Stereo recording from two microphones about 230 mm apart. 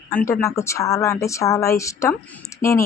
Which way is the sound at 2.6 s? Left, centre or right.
Left.